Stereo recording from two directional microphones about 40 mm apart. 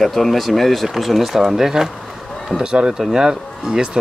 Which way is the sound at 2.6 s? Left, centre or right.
Right.